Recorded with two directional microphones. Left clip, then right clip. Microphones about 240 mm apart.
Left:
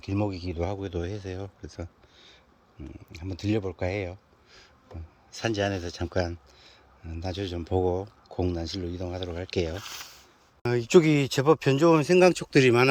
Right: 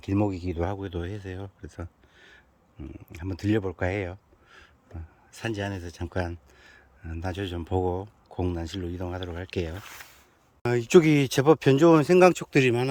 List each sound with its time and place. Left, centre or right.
0.0 s speech: right; by 12.8 s centre